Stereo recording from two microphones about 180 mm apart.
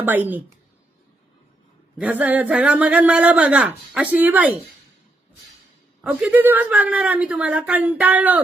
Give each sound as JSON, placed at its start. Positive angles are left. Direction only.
{"t": 0.0, "sound": "speech", "side_deg": -10}
{"t": 2.0, "sound": "speech", "side_deg": -10}
{"t": 6.0, "sound": "speech", "side_deg": -5}